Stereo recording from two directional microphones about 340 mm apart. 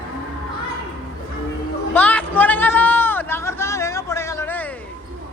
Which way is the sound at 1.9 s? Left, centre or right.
Centre.